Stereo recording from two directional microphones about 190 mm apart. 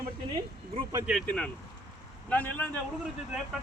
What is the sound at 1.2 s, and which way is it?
A man's voice, 5° left (ahead or behind).